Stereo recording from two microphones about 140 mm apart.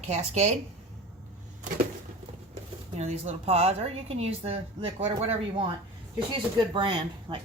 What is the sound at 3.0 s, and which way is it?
A woman's voice, 50° right (ahead or behind).